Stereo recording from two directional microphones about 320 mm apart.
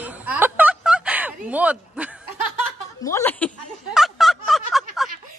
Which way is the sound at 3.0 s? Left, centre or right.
Centre.